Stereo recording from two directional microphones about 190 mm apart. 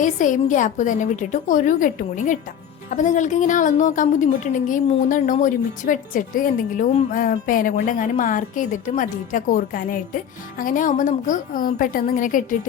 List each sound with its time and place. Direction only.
0.0 s a woman's voice: 40° left (ahead or behind)